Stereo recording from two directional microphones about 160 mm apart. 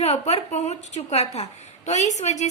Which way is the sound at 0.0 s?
40° left (ahead or behind).